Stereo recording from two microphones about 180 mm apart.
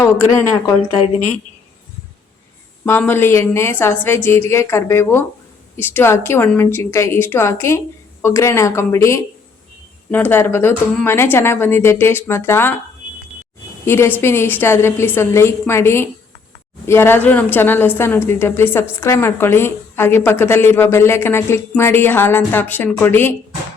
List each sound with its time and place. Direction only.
1.0 s speech: 40° left (ahead or behind)
2.8 s a woman's voice: 15° left (ahead or behind)
13.8 s a woman's voice: 15° left (ahead or behind)